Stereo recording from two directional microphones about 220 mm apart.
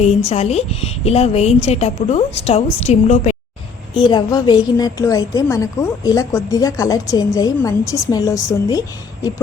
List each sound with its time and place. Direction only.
0.0 s a woman's voice: 30° left (ahead or behind)
3.9 s a woman's voice: 20° left (ahead or behind)